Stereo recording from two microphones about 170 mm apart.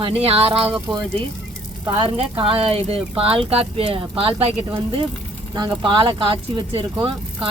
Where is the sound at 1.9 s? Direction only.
30° right (ahead or behind).